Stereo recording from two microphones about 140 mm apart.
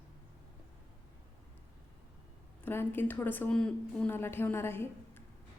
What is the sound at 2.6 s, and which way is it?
A woman's voice, 15° left (ahead or behind).